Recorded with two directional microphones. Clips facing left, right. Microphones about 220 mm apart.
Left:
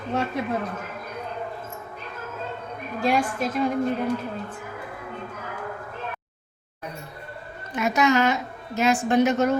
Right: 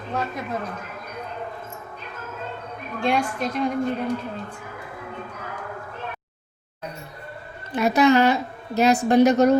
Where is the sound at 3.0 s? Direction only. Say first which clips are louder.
Even; 5° left (ahead or behind).